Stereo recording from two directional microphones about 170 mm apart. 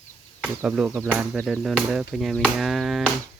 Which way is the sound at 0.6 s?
5° right (ahead or behind).